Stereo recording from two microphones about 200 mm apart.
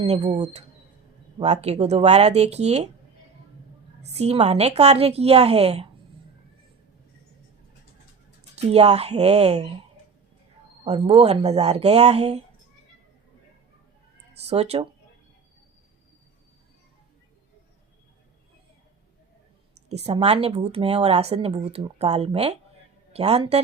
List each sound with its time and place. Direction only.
0.0 s speech: 30° right (ahead or behind)
4.1 s speech: 30° right (ahead or behind)
8.5 s speech: 30° right (ahead or behind)
10.8 s speech: 30° right (ahead or behind)
14.4 s speech: 30° right (ahead or behind)
19.9 s speech: 30° right (ahead or behind)